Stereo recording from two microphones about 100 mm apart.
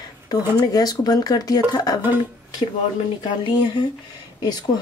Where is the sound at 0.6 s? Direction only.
40° left (ahead or behind).